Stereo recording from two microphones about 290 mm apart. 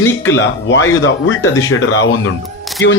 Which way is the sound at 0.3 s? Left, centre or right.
Left.